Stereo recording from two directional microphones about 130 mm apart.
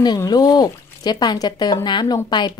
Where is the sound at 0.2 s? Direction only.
30° left (ahead or behind).